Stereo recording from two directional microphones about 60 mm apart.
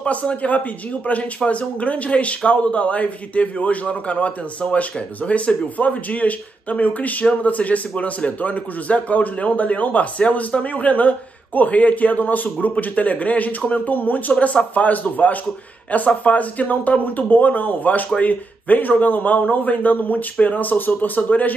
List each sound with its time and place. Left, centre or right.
0.0 s speech: left